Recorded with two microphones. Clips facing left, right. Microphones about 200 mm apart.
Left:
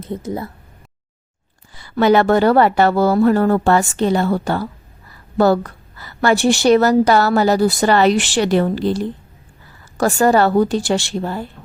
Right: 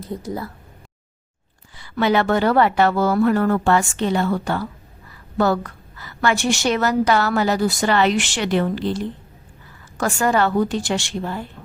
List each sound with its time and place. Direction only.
0.0 s speech: 20° left (ahead or behind)
1.7 s a woman's voice: 40° left (ahead or behind)